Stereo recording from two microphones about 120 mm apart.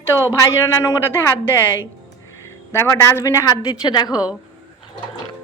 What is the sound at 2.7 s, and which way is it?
A woman's voice, 20° left (ahead or behind).